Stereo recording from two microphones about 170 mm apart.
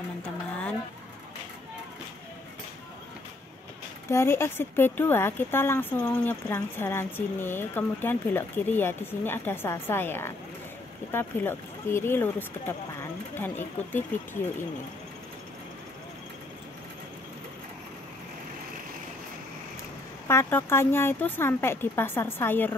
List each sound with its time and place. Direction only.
4.1 s speech: 15° left (ahead or behind)
20.2 s speech: 15° left (ahead or behind)